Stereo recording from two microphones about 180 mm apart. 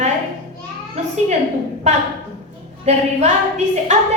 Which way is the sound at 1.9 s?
40° right (ahead or behind).